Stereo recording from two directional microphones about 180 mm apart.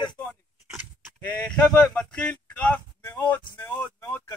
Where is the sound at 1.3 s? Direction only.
5° left (ahead or behind).